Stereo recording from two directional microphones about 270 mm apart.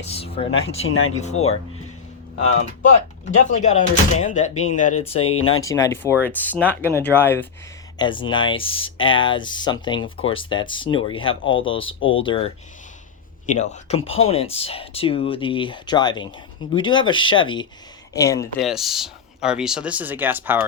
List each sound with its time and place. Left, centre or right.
0.0 s speech: left
1.4 s speech: left
3.2 s speech: left
5.6 s speech: centre
11.9 s speech: left
12.2 s speech: centre
13.5 s speech: left
18.6 s speech: centre